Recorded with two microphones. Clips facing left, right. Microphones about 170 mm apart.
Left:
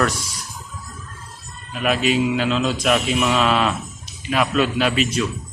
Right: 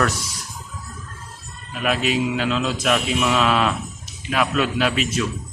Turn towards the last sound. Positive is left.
turn(degrees=0)  # may be behind; listen again after turning